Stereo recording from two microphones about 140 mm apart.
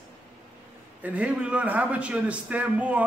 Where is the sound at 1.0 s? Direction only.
10° right (ahead or behind).